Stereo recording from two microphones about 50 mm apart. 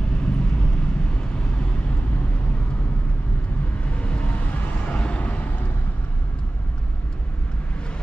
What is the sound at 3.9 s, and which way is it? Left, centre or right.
Vehicle, left.